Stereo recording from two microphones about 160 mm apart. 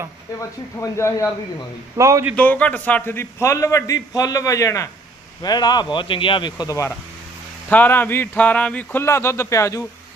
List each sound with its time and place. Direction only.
0.8 s speech: 15° left (ahead or behind)
2.0 s a man's voice: 20° right (ahead or behind)
2.3 s a man's voice: 10° left (ahead or behind)
7.7 s speech: 10° left (ahead or behind)